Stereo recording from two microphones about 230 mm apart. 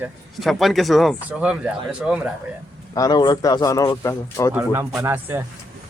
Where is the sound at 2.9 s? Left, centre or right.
Centre.